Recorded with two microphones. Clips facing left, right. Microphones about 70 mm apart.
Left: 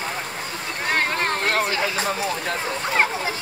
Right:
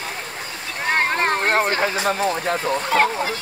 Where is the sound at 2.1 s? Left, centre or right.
Right.